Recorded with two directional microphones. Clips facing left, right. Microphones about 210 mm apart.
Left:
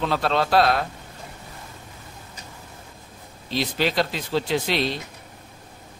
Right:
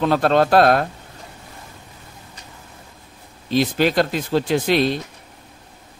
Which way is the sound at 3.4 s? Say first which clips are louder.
Right 6 dB; 50° right (ahead or behind).